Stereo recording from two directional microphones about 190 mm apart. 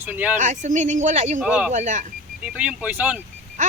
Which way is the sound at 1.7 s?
40° right (ahead or behind).